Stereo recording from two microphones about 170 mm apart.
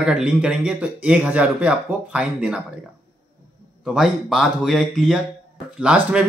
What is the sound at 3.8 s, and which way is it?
A man's voice, centre (ahead or behind).